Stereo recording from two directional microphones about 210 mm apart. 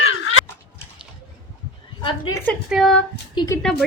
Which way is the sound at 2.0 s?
20° left (ahead or behind).